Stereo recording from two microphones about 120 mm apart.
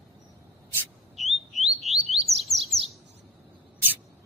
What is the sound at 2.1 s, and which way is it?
Chirp, centre (ahead or behind).